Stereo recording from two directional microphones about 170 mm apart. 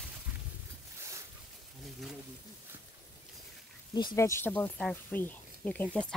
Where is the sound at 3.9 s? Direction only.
20° left (ahead or behind).